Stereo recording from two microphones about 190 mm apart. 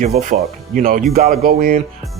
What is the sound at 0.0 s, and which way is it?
Speech, 45° right (ahead or behind).